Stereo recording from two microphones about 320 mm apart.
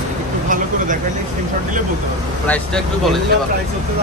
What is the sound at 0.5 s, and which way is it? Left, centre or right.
Speech, right.